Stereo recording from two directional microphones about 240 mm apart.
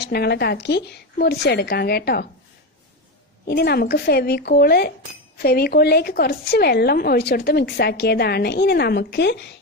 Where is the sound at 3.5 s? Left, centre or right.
Left.